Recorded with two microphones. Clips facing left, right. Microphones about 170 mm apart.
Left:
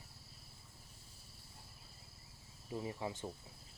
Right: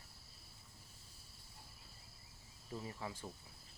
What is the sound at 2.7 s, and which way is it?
Speech, 20° left (ahead or behind).